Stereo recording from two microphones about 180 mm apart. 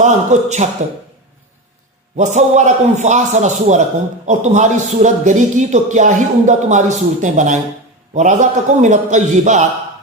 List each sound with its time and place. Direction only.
0.0 s a man's voice: 40° right (ahead or behind)
2.1 s a man's voice: 40° right (ahead or behind)